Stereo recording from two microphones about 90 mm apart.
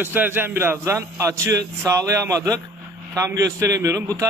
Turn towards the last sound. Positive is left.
turn(degrees=-40)  # may be behind; listen again after turning